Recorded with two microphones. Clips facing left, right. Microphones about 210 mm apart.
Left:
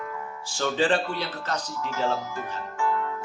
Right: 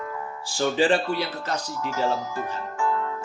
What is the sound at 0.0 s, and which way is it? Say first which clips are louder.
Music: right 2 dB; 35° right (ahead or behind).